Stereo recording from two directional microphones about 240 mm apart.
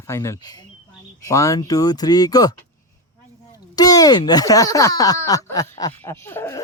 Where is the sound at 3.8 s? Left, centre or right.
Centre.